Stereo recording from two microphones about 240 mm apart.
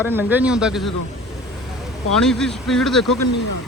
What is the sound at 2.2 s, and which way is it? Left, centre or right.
Speech, centre.